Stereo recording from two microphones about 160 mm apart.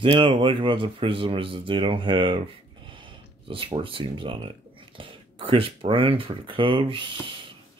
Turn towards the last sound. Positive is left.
turn(degrees=-30)  # may be behind; listen again after turning